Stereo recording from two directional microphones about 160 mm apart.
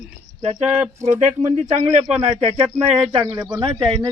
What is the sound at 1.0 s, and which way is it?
Speech, 45° right (ahead or behind).